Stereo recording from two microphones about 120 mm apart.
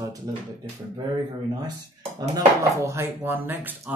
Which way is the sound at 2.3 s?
25° right (ahead or behind).